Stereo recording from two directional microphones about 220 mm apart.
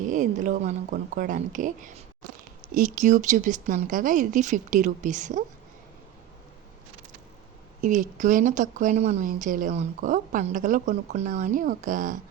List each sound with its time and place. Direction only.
0.0 s speech: 35° right (ahead or behind)
7.8 s speech: 35° right (ahead or behind)